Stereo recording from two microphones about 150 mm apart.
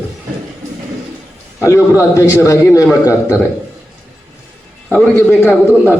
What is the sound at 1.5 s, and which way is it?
A man's voice, 20° left (ahead or behind).